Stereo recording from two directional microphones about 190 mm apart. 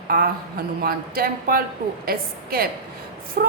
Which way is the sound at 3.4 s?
55° right (ahead or behind).